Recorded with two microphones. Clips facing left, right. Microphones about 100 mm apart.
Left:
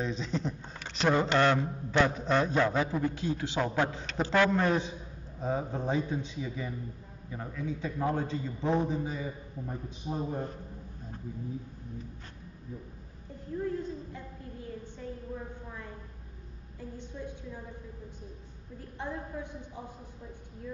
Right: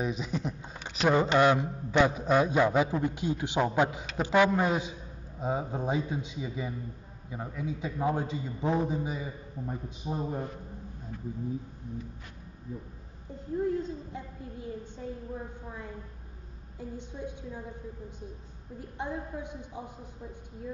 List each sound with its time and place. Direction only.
0.0 s speech: 10° right (ahead or behind)
13.6 s a child's voice: 20° right (ahead or behind)
15.0 s a sound: 20° right (ahead or behind)
16.9 s speech: 20° right (ahead or behind)
18.8 s speech: 15° right (ahead or behind)